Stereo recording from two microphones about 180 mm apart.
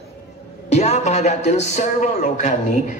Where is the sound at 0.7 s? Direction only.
40° left (ahead or behind).